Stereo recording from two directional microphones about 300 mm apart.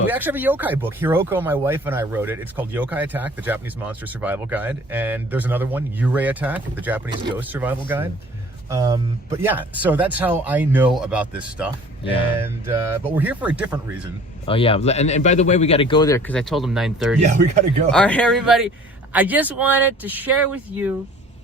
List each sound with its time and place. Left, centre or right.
0.1 s speech: centre
12.0 s speech: centre
12.4 s speech: centre
14.4 s speech: centre
17.2 s speech: right
17.9 s speech: centre